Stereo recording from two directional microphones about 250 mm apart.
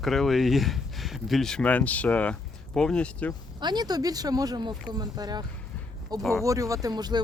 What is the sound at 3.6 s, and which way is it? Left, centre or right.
Speech, centre.